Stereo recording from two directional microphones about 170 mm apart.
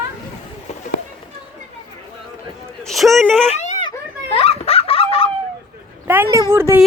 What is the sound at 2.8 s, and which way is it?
Speech, centre (ahead or behind).